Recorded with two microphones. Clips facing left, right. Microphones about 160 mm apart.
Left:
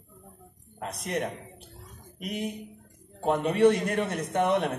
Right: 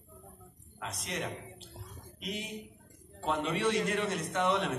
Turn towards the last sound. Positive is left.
turn(degrees=55)  # may be behind; listen again after turning